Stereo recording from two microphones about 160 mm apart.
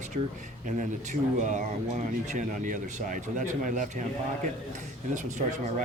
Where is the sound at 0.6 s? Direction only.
50° right (ahead or behind).